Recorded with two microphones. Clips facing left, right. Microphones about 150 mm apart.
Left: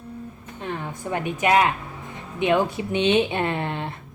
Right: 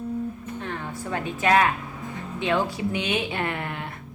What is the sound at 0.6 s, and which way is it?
Speech, 20° left (ahead or behind).